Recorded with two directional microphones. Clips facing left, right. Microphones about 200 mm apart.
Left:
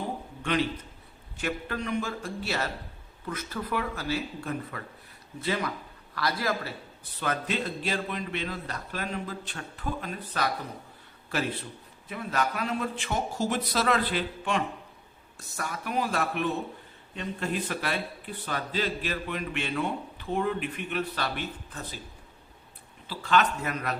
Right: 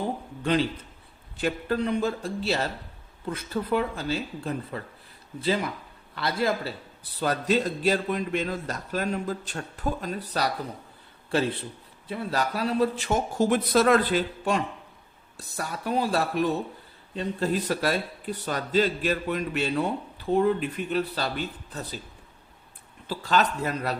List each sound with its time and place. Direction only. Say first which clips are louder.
0.4 s a man's voice: right 3 dB; 30° right (ahead or behind)
7.2 s a man's voice: right 6 dB; 35° right (ahead or behind)
23.0 s a man's voice: right 1 dB; 40° right (ahead or behind)